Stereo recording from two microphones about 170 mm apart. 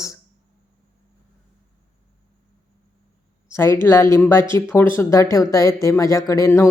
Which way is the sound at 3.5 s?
15° left (ahead or behind).